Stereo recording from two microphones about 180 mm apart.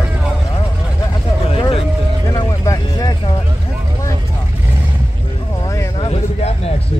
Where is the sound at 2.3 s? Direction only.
20° left (ahead or behind).